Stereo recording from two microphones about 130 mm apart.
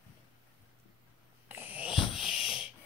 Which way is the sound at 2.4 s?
5° right (ahead or behind).